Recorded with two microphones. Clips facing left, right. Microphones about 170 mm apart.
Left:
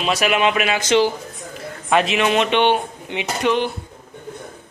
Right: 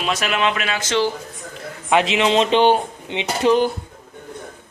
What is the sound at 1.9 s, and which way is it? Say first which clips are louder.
A man's voice: right 1 dB; 20° right (ahead or behind).